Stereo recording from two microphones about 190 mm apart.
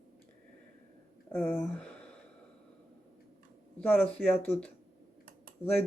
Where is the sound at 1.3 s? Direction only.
5° left (ahead or behind).